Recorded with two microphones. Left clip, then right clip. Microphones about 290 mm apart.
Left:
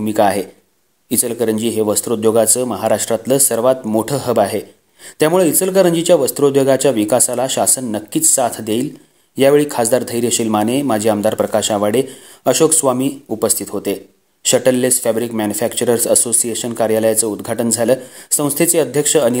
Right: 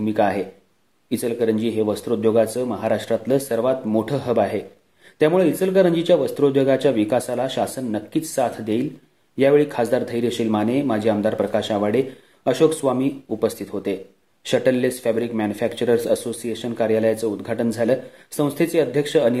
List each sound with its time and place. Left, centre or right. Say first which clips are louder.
0.0 s speech: left 5 dB; left